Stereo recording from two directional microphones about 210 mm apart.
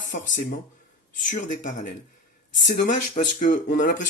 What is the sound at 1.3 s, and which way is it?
Speech, 35° left (ahead or behind).